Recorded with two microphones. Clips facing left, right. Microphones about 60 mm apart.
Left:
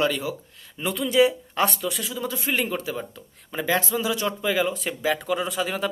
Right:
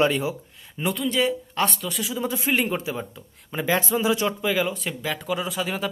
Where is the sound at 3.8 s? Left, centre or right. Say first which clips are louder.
Right 3 dB; right.